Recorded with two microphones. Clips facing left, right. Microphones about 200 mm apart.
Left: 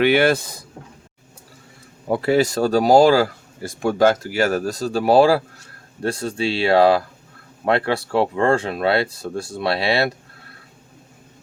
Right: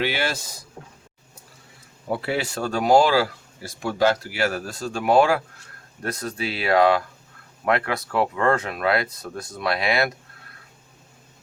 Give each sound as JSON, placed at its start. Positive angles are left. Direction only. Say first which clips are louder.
{"t": 0.0, "sound": "speech", "louder": "left 10 dB", "side_deg": 55}
{"t": 2.0, "sound": "speech", "louder": "left 8 dB", "side_deg": 40}